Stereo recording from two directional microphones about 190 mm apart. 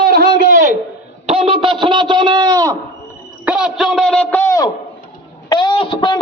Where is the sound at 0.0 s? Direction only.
50° right (ahead or behind).